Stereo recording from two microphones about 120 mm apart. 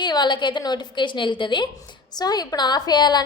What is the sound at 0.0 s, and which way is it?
A woman's voice, 40° left (ahead or behind).